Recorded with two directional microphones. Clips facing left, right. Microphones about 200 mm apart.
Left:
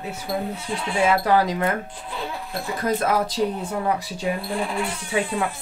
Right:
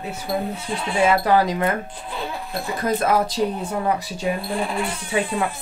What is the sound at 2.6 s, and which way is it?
Speech, 25° right (ahead or behind).